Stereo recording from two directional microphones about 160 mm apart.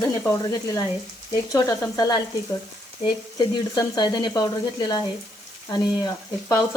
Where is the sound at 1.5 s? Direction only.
25° left (ahead or behind).